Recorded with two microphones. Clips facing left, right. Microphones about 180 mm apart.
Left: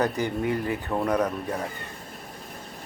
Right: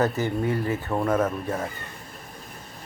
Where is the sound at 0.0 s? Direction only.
15° left (ahead or behind).